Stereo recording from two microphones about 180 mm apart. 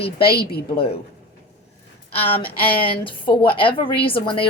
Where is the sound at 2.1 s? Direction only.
30° left (ahead or behind).